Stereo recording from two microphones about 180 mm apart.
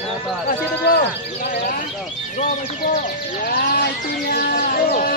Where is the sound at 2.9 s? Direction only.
50° left (ahead or behind).